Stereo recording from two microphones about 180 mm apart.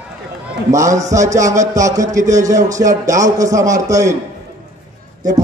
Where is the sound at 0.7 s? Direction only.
15° right (ahead or behind).